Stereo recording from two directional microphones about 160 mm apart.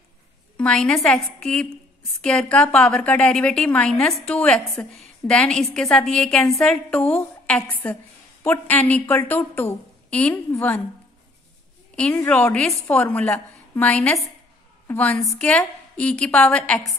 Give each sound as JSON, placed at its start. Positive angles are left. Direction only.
{"t": 0.6, "sound": "a woman's voice", "side_deg": 5}
{"t": 11.9, "sound": "a woman's voice", "side_deg": 5}